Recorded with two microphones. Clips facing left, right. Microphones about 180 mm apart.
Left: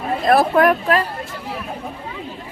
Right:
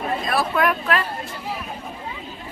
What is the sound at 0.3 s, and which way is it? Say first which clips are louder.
Speech: left 9 dB; 50° left (ahead or behind).